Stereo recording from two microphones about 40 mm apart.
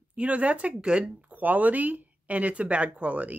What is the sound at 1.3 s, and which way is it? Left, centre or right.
Speech, right.